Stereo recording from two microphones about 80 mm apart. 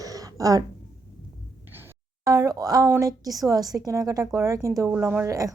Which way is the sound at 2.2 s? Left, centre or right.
Right.